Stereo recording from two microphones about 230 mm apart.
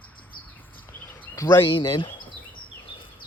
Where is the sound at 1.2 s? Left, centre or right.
Centre.